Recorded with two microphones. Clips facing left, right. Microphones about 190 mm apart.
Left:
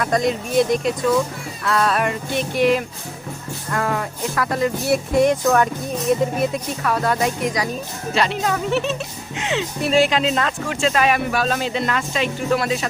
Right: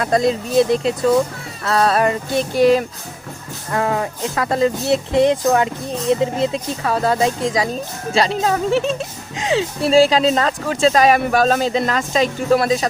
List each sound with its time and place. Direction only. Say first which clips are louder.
0.0 s speech: right 3 dB; 30° right (ahead or behind)
3.7 s music: right 3 dB; 20° right (ahead or behind)
8.1 s speech: right 3 dB; 35° right (ahead or behind)